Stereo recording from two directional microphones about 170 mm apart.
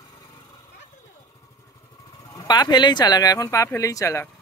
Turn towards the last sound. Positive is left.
turn(degrees=20)  # may be behind; listen again after turning